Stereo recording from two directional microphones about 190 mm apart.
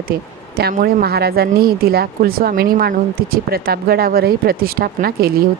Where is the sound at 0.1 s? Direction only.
50° right (ahead or behind).